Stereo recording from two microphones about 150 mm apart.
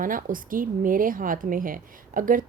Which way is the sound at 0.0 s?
65° right (ahead or behind).